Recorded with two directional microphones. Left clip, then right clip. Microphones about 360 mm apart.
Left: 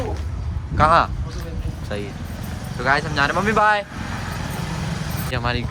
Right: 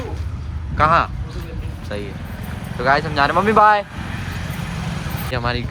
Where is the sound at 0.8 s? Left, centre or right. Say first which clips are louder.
Even; centre.